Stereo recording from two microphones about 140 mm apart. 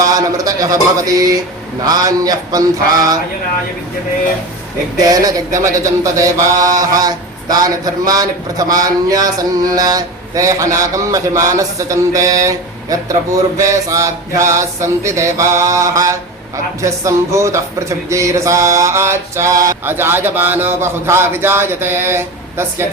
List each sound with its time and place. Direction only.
0.0 s speech: 25° right (ahead or behind)
4.9 s speech: 25° right (ahead or behind)